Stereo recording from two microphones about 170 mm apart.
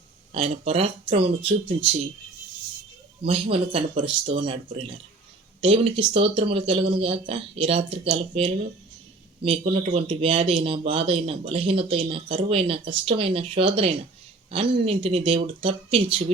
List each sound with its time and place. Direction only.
0.3 s speech: 35° right (ahead or behind)
3.2 s speech: 35° right (ahead or behind)